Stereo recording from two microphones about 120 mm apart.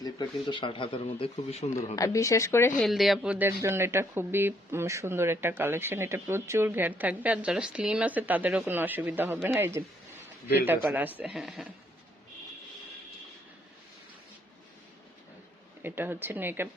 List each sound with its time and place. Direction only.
0.0 s speech: 35° left (ahead or behind); by 1.6 s 55° left (ahead or behind)
2.0 s speech: 25° left (ahead or behind)
2.7 s speech: centre (ahead or behind)
3.3 s speech: 20° right (ahead or behind)
10.8 s speech: 15° right (ahead or behind)
15.8 s speech: 20° right (ahead or behind)